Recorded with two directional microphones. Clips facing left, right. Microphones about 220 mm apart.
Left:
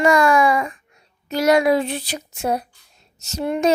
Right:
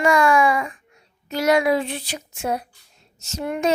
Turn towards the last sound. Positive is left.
turn(degrees=35)  # may be behind; listen again after turning